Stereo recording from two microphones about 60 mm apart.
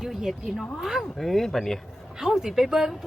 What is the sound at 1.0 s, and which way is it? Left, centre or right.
Speech, centre.